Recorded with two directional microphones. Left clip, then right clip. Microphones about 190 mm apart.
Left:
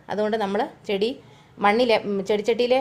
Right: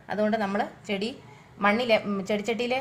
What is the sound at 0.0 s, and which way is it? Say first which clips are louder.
A woman's voice: left 3 dB; 40° left (ahead or behind).